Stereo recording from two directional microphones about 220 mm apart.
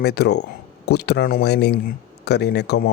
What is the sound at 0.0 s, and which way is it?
Speech, 50° left (ahead or behind).